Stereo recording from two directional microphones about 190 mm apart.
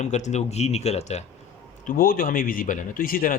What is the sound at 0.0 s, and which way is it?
Speech, 35° left (ahead or behind).